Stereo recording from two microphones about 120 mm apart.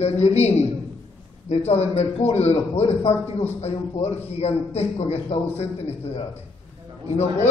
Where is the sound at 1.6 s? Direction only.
60° left (ahead or behind).